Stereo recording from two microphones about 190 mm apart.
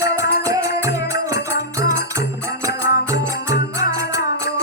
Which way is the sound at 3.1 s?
15° right (ahead or behind).